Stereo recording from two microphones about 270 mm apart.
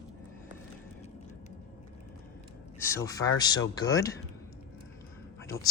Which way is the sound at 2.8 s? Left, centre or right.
Centre.